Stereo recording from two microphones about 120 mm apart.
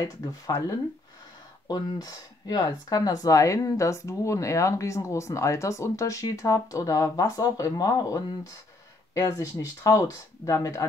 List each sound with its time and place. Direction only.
0.0 s speech: 35° left (ahead or behind)